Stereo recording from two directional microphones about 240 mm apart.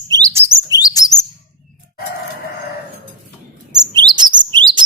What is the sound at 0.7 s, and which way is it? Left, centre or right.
Chirp, centre.